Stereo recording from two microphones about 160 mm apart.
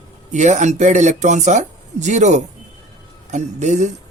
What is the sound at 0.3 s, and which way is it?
A man's voice, 50° right (ahead or behind).